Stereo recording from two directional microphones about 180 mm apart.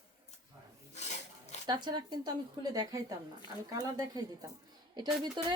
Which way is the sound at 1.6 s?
25° right (ahead or behind).